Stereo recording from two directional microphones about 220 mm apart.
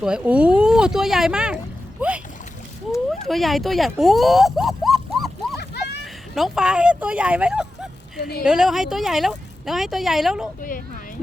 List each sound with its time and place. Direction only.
0.0 s speech: 5° right (ahead or behind)
3.2 s speech: centre (ahead or behind)
5.5 s a sound: 50° left (ahead or behind)
6.3 s speech: centre (ahead or behind)
8.2 s a woman's voice: 45° left (ahead or behind)
8.4 s speech: centre (ahead or behind)
10.6 s speech: 40° left (ahead or behind)